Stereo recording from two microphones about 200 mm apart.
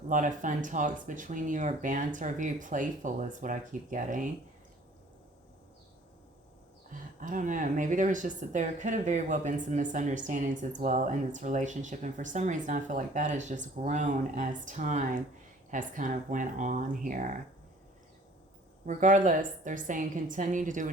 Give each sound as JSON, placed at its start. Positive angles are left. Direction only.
{"t": 0.1, "sound": "speech", "side_deg": -40}
{"t": 7.2, "sound": "speech", "side_deg": -40}
{"t": 18.9, "sound": "speech", "side_deg": -40}